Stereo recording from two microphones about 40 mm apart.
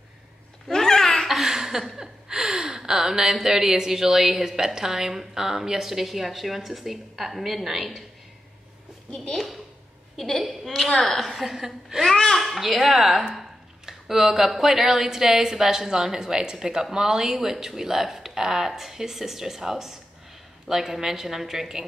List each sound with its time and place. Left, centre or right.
0.7 s babbling: centre
1.2 s a sound: centre
2.8 s a woman's voice: centre
10.1 s a woman's voice: centre
12.0 s a child's voice: centre
12.4 s a woman's voice: centre